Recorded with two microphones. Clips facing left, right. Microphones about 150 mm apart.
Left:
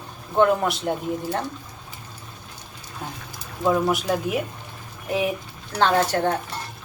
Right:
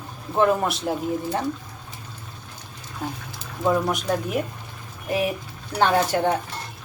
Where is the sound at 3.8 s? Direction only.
5° left (ahead or behind).